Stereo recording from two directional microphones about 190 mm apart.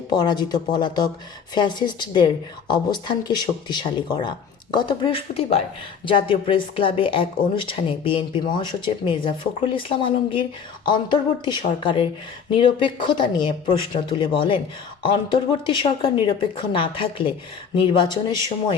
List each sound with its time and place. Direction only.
0.1 s a woman's voice: 20° left (ahead or behind)